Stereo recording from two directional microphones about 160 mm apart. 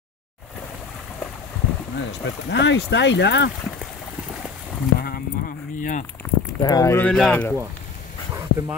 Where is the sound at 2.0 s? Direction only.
90° left.